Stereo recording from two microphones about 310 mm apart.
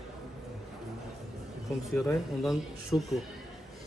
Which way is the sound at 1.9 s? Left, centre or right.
Centre.